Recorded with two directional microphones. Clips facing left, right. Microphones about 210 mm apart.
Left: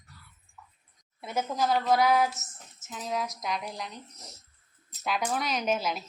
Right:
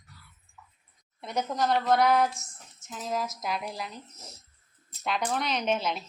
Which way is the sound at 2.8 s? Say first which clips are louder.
Right 1 dB; centre (ahead or behind).